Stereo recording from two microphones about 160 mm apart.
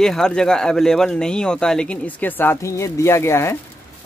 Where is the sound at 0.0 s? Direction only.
5° left (ahead or behind).